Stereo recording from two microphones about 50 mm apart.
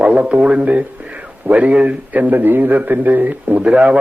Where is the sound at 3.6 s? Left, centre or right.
Right.